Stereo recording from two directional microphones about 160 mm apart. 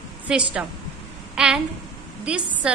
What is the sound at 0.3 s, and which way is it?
A woman's voice, 5° right (ahead or behind).